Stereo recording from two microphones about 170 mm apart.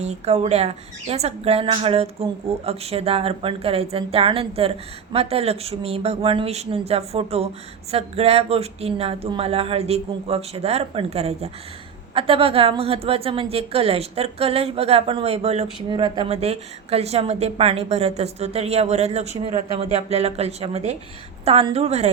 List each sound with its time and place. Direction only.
0.0 s a woman's voice: 40° right (ahead or behind)